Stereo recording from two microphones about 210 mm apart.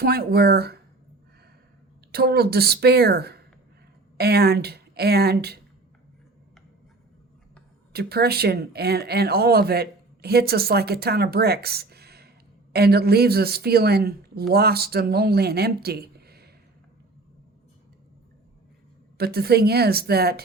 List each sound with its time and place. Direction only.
0.0 s speech: 45° right (ahead or behind)
2.1 s speech: 50° right (ahead or behind)
7.9 s speech: 50° right (ahead or behind)
19.1 s speech: 50° right (ahead or behind)